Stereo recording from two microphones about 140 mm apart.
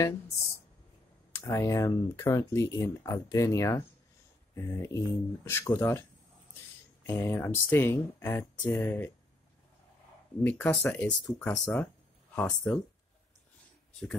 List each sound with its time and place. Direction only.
1.3 s speech: 20° left (ahead or behind)
10.4 s speech: 15° left (ahead or behind)